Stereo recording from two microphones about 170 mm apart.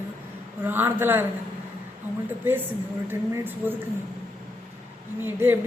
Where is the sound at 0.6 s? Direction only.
10° right (ahead or behind).